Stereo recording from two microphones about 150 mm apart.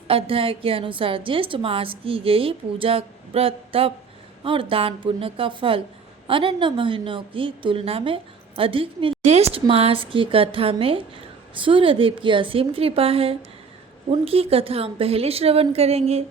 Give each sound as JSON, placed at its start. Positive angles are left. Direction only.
{"t": 0.1, "sound": "a woman's voice", "side_deg": -40}